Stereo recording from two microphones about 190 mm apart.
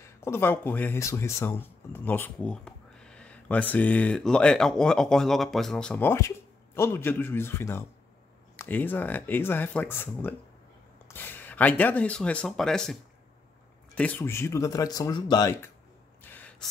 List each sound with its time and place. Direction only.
0.0 s speech: 15° left (ahead or behind)
13.9 s speech: 10° left (ahead or behind)
16.2 s a sound: 10° left (ahead or behind)